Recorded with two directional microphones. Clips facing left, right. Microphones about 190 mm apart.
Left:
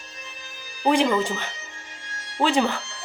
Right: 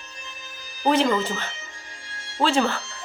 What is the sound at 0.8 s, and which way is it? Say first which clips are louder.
Speech: even; 15° left (ahead or behind).